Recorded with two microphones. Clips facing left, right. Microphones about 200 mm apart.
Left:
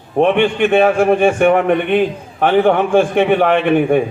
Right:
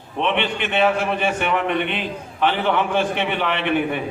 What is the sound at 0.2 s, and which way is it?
A man's voice, 50° left (ahead or behind).